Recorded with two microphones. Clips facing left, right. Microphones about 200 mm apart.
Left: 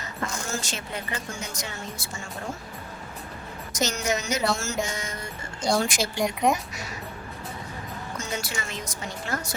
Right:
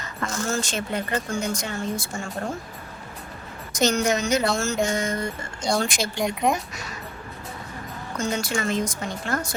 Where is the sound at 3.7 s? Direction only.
55° right (ahead or behind).